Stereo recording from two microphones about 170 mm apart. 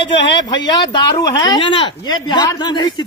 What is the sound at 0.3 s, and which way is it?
A man's voice, 25° left (ahead or behind).